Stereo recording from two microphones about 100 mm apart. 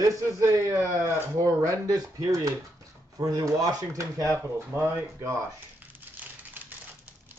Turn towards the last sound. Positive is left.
turn(degrees=-20)  # may be behind; listen again after turning